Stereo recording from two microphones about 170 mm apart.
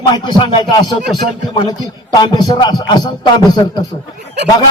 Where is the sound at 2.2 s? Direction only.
25° left (ahead or behind).